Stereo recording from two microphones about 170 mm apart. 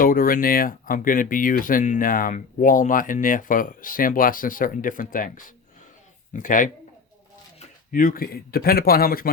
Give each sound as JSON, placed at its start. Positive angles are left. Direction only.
{"t": 0.0, "sound": "speech", "side_deg": 55}